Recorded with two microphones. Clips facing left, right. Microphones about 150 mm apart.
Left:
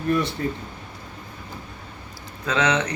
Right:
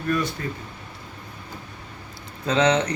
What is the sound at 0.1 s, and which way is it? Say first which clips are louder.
Speech: left 2 dB; 25° left (ahead or behind).